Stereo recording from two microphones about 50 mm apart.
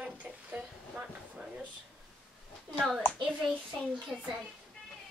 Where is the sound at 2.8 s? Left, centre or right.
Centre.